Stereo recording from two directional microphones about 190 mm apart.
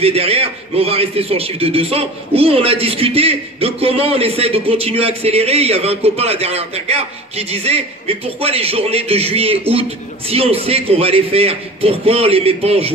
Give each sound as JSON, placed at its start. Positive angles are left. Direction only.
{"t": 0.0, "sound": "a man's voice", "side_deg": -30}